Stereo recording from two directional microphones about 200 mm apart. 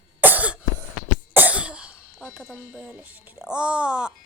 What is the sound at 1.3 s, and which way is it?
Speech, 10° right (ahead or behind).